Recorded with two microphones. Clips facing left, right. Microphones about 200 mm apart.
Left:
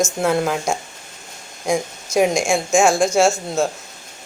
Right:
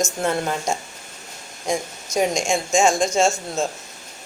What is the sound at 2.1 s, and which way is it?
A woman's voice, 10° left (ahead or behind).